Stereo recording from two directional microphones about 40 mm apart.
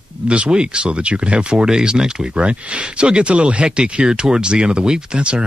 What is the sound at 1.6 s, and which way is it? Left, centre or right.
Speech, centre.